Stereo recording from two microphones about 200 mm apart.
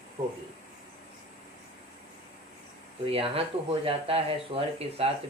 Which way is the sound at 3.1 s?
30° right (ahead or behind).